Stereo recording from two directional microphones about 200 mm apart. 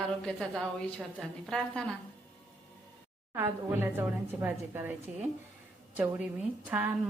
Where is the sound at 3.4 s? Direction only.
10° right (ahead or behind).